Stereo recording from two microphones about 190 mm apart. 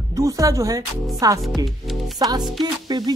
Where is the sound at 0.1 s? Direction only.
15° right (ahead or behind).